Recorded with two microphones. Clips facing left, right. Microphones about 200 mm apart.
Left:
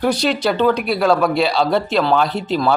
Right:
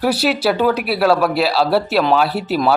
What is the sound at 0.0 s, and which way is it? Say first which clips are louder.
A man's voice: right 1 dB; 5° right (ahead or behind).